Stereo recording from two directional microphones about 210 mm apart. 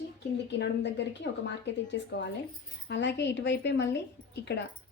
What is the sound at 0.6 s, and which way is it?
A woman's voice, 55° left (ahead or behind).